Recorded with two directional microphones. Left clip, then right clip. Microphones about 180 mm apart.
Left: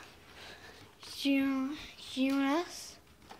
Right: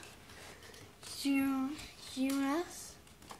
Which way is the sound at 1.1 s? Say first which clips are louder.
Left 3 dB; 15° left (ahead or behind).